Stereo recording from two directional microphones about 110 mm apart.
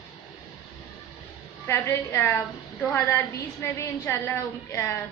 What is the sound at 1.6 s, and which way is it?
A woman's voice, 25° left (ahead or behind).